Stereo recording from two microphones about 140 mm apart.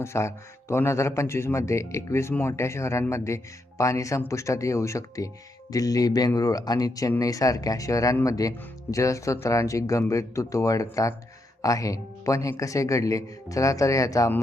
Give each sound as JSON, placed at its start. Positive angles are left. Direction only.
{"t": 0.0, "sound": "speech", "side_deg": 20}